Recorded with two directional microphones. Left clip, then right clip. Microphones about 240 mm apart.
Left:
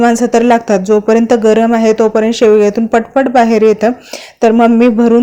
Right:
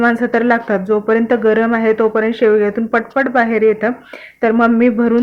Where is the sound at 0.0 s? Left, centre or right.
Left.